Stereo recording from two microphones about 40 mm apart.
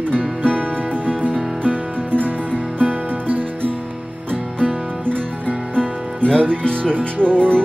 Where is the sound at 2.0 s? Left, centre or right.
Right.